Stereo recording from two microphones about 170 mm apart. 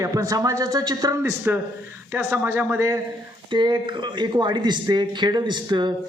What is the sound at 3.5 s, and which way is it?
A man's voice, 25° right (ahead or behind).